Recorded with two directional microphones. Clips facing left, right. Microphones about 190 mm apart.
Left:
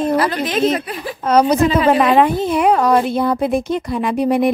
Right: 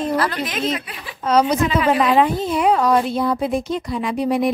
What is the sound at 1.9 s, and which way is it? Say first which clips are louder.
A woman's voice: left 2 dB; 60° left (ahead or behind).